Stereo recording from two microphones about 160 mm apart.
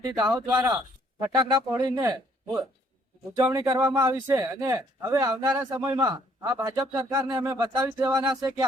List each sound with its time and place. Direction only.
0.4 s speech: 10° right (ahead or behind)
1.2 s speech: 25° right (ahead or behind)